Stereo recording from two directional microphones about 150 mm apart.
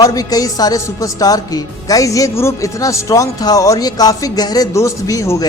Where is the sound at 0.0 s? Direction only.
25° left (ahead or behind).